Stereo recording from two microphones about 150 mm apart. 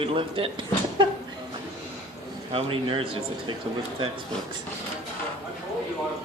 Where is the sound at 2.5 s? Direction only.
35° right (ahead or behind).